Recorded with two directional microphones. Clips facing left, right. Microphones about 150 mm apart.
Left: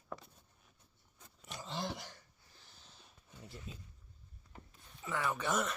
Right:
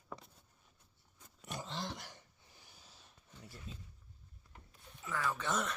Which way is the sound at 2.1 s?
15° right (ahead or behind).